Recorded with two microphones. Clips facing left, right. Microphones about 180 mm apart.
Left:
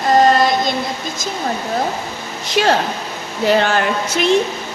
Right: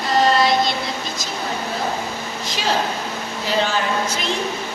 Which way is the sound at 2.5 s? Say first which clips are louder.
Left 7 dB; 65° left (ahead or behind).